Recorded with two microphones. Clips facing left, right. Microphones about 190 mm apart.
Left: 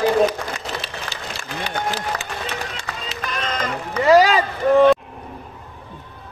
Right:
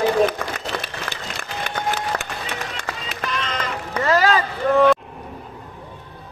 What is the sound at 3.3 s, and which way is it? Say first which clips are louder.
Music: left 2 dB; 45° left (ahead or behind).